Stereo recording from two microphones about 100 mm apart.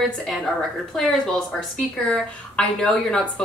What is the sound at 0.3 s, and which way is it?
Speech, centre (ahead or behind).